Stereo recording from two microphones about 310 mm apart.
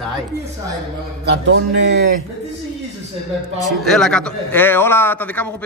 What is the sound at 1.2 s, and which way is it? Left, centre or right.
Speech, right.